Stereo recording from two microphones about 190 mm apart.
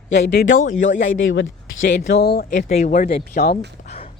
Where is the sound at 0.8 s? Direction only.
80° left.